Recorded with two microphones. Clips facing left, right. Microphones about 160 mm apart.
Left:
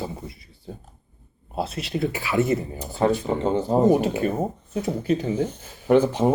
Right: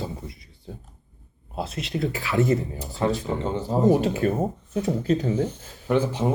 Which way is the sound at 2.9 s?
55° left (ahead or behind).